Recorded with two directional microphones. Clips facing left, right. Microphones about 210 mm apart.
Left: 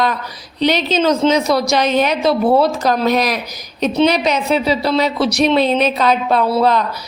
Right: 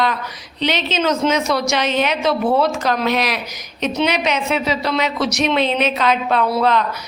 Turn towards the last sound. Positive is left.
turn(degrees=35)  # may be behind; listen again after turning